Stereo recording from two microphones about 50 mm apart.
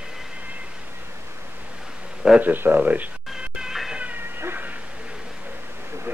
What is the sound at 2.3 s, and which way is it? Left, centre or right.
Speech, right.